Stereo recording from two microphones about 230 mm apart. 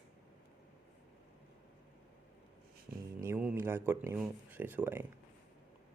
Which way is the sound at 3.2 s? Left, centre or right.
Centre.